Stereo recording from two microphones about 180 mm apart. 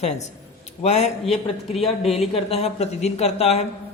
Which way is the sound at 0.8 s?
40° left (ahead or behind).